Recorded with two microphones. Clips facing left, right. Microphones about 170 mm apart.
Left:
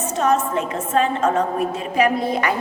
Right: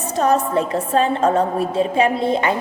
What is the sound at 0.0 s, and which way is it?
A woman's voice, 35° right (ahead or behind).